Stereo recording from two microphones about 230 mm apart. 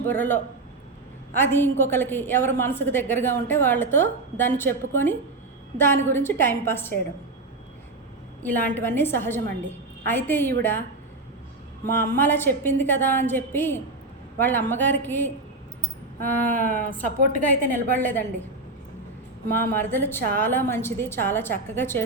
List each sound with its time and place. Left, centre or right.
0.1 s a woman's voice: centre
1.4 s a woman's voice: centre
8.4 s a woman's voice: centre
11.9 s a woman's voice: centre
16.9 s a woman's voice: right
17.9 s a woman's voice: centre
19.5 s a woman's voice: centre